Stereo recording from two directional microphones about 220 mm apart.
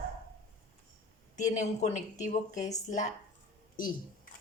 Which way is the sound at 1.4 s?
35° left (ahead or behind).